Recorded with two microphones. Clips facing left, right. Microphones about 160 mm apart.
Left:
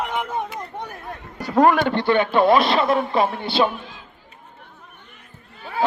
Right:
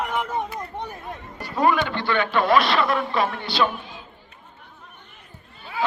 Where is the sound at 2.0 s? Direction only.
25° left (ahead or behind).